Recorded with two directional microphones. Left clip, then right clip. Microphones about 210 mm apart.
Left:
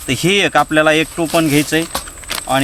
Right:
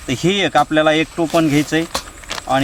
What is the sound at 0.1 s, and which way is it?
Speech, 10° left (ahead or behind).